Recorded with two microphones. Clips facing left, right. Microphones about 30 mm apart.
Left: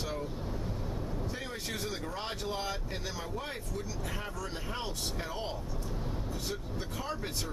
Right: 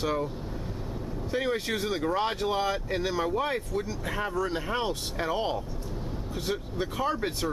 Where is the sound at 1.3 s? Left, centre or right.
Right.